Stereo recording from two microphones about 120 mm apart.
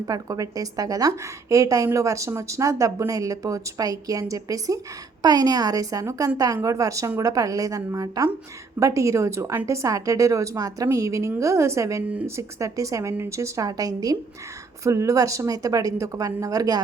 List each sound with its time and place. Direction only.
0.1 s a woman's voice: 30° right (ahead or behind)
12.0 s speech: 10° right (ahead or behind)
12.4 s a woman's voice: 25° right (ahead or behind)